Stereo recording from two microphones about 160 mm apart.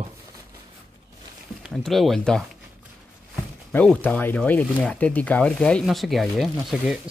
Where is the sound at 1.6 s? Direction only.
Centre (ahead or behind).